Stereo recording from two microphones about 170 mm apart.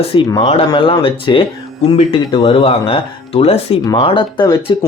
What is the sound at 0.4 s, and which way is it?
Speech, 30° left (ahead or behind).